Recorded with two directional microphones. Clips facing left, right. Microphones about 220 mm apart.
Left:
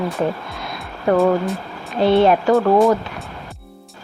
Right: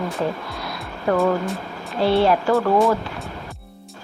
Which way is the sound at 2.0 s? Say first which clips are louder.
Left 3 dB; 20° left (ahead or behind).